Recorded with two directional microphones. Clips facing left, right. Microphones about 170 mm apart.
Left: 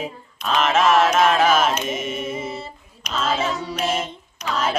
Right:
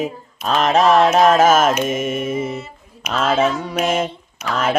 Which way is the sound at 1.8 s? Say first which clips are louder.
Right 5 dB; 50° right (ahead or behind).